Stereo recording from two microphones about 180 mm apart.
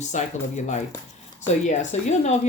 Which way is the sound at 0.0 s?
40° left (ahead or behind).